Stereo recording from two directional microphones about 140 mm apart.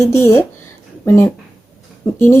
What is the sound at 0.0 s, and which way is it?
Speech, 20° left (ahead or behind).